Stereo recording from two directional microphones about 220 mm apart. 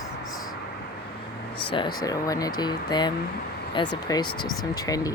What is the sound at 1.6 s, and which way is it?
Speech, 20° left (ahead or behind).